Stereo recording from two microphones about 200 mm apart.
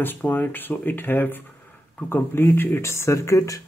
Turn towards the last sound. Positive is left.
turn(degrees=15)  # may be behind; listen again after turning